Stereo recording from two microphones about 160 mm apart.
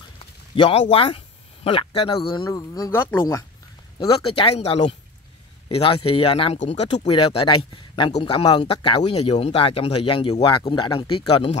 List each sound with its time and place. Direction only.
0.6 s speech: 35° left (ahead or behind); by 3.4 s 15° left (ahead or behind)
4.0 s speech: 35° left (ahead or behind)